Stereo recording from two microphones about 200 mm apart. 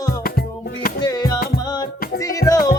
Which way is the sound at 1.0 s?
20° left (ahead or behind).